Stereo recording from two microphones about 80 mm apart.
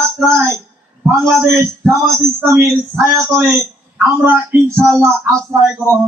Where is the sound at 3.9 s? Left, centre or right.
Right.